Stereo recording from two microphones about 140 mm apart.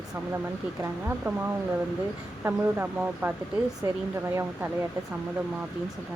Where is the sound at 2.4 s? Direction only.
15° right (ahead or behind).